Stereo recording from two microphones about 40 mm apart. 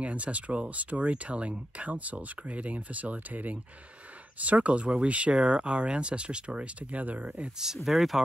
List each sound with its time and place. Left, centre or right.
0.0 s speech: right
7.5 s speech: centre